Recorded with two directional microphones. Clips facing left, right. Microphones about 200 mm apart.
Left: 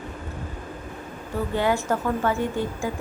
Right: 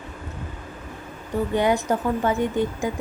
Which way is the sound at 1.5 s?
20° right (ahead or behind).